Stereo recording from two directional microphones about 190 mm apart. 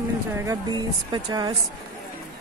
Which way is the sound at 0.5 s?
20° right (ahead or behind).